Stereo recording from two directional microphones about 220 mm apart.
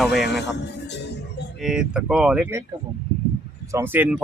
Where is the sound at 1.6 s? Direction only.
5° right (ahead or behind).